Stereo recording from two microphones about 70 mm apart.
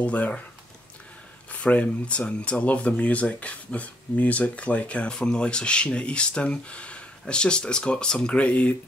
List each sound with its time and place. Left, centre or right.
0.0 s speech: centre
1.5 s speech: centre